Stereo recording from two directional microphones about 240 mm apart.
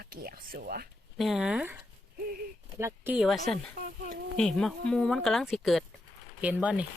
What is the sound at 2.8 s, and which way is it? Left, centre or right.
Speech, centre.